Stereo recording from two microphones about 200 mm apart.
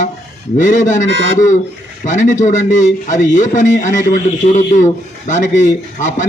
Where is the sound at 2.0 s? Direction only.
40° left (ahead or behind).